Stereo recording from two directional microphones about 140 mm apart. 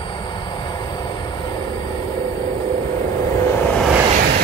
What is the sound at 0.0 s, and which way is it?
Train, 30° left (ahead or behind).